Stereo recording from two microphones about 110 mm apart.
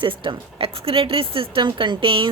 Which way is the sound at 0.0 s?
50° right (ahead or behind).